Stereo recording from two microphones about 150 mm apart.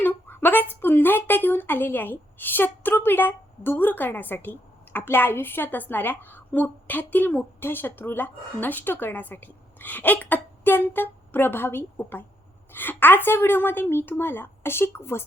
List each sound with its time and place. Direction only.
0.0 s a woman's voice: 15° left (ahead or behind)